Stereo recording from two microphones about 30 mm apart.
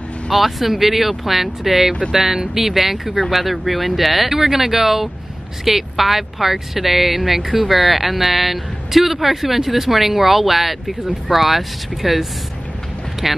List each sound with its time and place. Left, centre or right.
0.3 s speech: centre; by 2.4 s right
2.5 s speech: centre